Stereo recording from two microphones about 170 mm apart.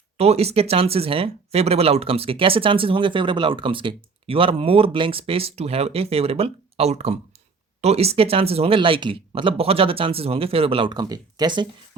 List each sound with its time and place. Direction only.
0.2 s speech: 35° right (ahead or behind)